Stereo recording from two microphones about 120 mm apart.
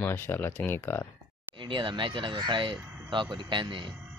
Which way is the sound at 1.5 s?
45° right (ahead or behind).